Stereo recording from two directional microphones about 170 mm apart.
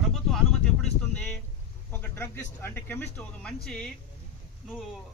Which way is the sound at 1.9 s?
15° left (ahead or behind).